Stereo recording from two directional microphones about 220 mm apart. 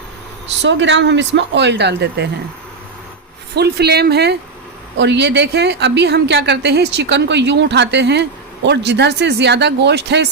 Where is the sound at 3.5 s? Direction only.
50° right (ahead or behind).